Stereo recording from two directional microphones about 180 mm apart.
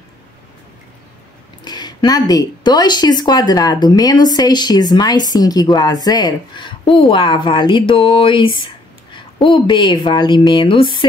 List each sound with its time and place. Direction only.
1.6 s speech: 25° left (ahead or behind)